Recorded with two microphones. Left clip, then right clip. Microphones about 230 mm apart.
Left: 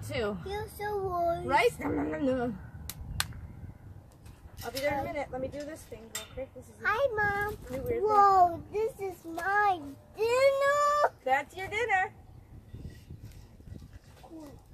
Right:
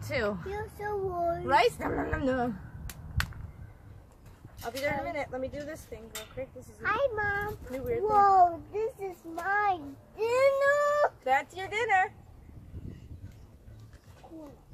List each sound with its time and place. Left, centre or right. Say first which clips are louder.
0.0 s speech: right 2 dB; centre
0.5 s a child's voice: even; centre
1.5 s speech: right 3 dB; centre
4.6 s speech: even; centre
6.8 s a child's voice: left 1 dB; left
11.2 s speech: right 1 dB; centre